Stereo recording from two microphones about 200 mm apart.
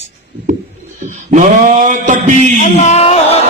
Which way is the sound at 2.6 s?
35° left (ahead or behind).